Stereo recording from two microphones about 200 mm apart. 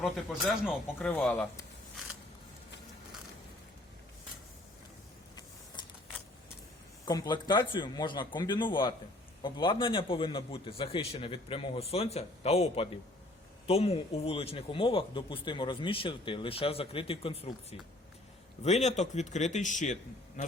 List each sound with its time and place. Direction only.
0.0 s speech: centre (ahead or behind)
7.0 s a man's voice: 20° left (ahead or behind); by 20.4 s 35° left (ahead or behind)